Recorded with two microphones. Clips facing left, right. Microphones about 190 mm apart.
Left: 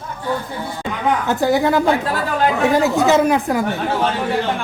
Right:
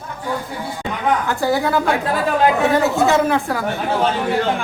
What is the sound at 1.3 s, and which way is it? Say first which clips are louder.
A woman's voice: left 2 dB; 20° left (ahead or behind).